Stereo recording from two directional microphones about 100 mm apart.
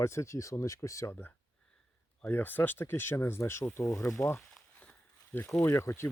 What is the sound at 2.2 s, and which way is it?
Speech, 20° left (ahead or behind).